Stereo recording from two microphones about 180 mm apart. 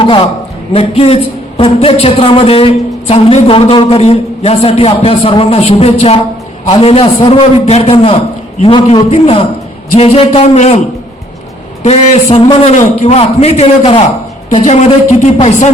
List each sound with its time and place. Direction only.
0.0 s a man's voice: 30° left (ahead or behind)
11.9 s a man's voice: 30° left (ahead or behind)